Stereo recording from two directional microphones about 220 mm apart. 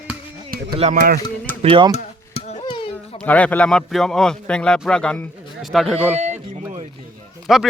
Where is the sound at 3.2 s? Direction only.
5° left (ahead or behind).